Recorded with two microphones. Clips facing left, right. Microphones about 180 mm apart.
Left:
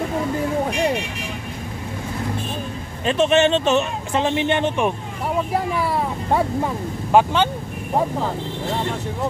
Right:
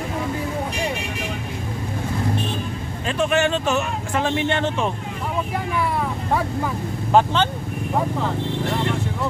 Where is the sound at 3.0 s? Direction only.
20° left (ahead or behind).